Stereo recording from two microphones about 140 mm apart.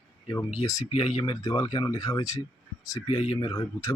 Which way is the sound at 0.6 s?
25° left (ahead or behind).